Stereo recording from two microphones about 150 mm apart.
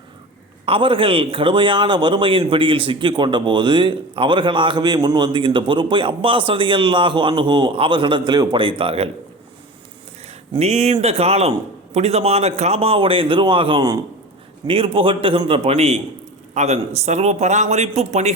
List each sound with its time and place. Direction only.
0.6 s a man's voice: 35° right (ahead or behind)
10.6 s a man's voice: 45° right (ahead or behind)